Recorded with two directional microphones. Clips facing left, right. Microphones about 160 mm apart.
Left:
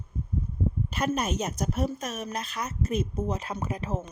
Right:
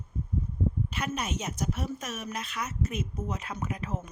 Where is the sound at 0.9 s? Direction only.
40° left (ahead or behind).